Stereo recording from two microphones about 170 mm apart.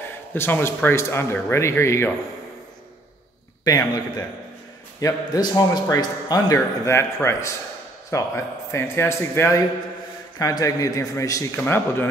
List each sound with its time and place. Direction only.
0.3 s speech: 10° left (ahead or behind)
3.6 s a man's voice: 20° left (ahead or behind)
5.0 s a man's voice: 20° left (ahead or behind)